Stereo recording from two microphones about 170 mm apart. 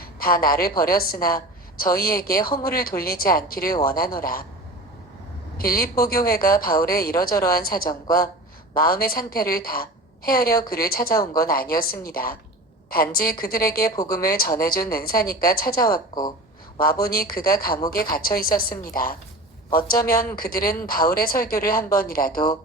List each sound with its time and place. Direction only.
0.0 s a woman's voice: 60° left (ahead or behind)
5.5 s a woman's voice: 60° left (ahead or behind)
20.3 s a woman's voice: 60° left (ahead or behind)